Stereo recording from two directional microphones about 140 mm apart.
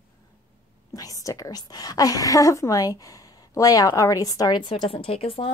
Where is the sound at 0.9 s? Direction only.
25° left (ahead or behind); by 5.5 s 45° left (ahead or behind).